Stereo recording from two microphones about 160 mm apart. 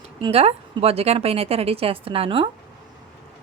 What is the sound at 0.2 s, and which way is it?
A woman's voice, 40° right (ahead or behind).